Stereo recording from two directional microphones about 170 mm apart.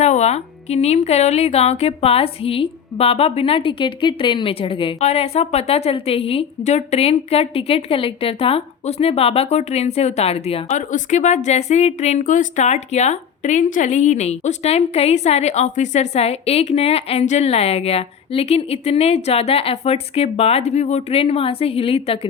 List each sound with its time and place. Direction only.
0.0 s speech: 40° left (ahead or behind)